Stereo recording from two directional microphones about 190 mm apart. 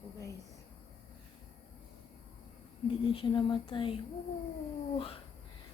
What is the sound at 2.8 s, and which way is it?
Speech, 30° left (ahead or behind).